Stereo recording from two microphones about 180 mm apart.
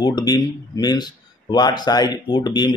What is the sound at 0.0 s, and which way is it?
Speech, 20° left (ahead or behind).